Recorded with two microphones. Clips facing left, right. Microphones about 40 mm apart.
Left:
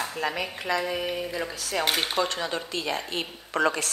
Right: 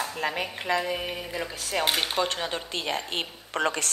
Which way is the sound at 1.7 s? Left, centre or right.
Centre.